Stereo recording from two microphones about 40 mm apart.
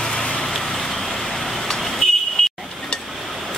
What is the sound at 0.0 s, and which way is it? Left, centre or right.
Vehicle, centre.